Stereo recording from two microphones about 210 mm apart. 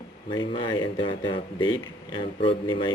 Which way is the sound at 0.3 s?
20° left (ahead or behind).